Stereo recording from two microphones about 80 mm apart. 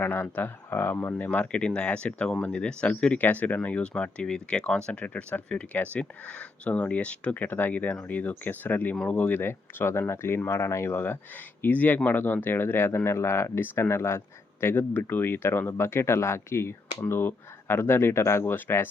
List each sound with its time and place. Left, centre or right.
0.0 s speech: left